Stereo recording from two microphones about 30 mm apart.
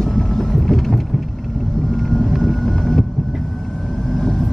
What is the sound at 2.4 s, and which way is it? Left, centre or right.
Vehicle, centre.